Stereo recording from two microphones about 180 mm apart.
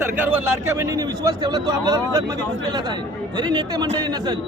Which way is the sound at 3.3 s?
25° right (ahead or behind).